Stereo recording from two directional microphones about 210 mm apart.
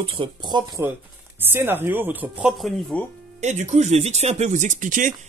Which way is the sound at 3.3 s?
35° right (ahead or behind).